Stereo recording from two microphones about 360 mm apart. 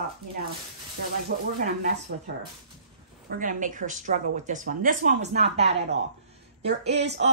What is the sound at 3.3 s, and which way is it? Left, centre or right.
Speech, right.